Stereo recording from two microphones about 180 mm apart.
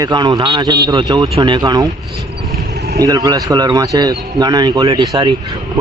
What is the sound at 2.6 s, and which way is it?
Vehicle, 60° right (ahead or behind).